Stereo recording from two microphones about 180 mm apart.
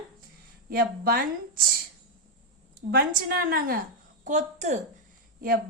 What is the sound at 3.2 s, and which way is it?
Speech, 55° right (ahead or behind).